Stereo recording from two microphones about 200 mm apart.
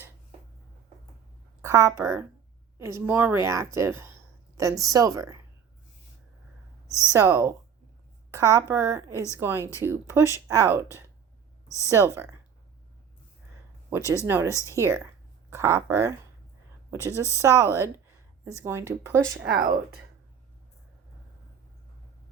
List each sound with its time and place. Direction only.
1.6 s a woman's voice: 15° right (ahead or behind)
6.8 s a sound: 15° left (ahead or behind)
7.1 s a woman's voice: 15° right (ahead or behind)
11.9 s a woman's voice: 15° right (ahead or behind)
14.3 s a woman's voice: 10° right (ahead or behind)
14.5 s speech: 15° left (ahead or behind)
14.8 s a woman's voice: 15° right (ahead or behind)
17.4 s a woman's voice: 15° right (ahead or behind)
19.4 s speech: 50° right (ahead or behind)